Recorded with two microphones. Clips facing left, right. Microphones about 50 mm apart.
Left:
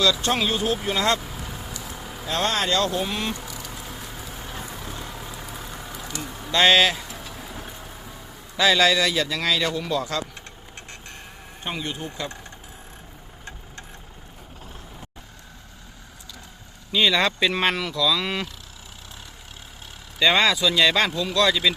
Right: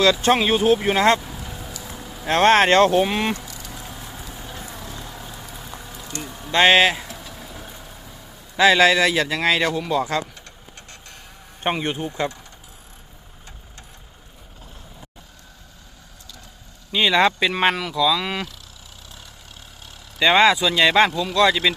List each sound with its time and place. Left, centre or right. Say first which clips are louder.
0.0 s a man's voice: right 5 dB; right
2.2 s speech: right 9 dB; right
6.5 s speech: right 3 dB; right
8.6 s a man's voice: right 4 dB; right
11.6 s a man's voice: right 7 dB; right
16.9 s speech: right 3 dB; centre
20.1 s speech: right 4 dB; right